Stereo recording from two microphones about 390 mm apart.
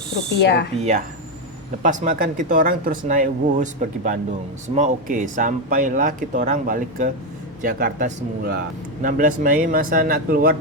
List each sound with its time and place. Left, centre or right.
0.3 s speech: left
0.8 s a man's voice: centre